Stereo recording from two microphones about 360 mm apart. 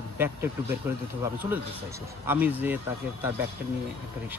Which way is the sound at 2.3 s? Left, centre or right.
Centre.